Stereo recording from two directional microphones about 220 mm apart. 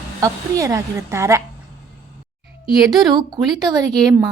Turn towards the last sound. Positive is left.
turn(degrees=-20)  # may be behind; listen again after turning